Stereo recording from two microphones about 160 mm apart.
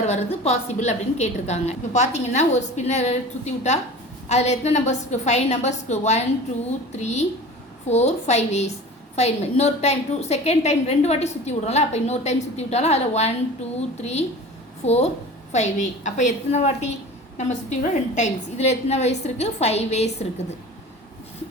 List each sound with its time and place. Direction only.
0.0 s a woman's voice: 45° left (ahead or behind)